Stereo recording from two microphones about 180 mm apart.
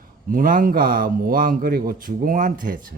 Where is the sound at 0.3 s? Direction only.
50° right (ahead or behind).